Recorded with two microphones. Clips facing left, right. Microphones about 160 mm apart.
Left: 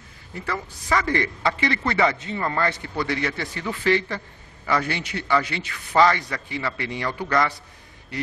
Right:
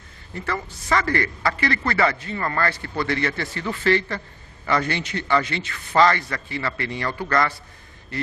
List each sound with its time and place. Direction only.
0.3 s a man's voice: 10° left (ahead or behind)